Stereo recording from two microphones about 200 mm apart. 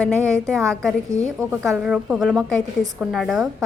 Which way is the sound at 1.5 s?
5° right (ahead or behind).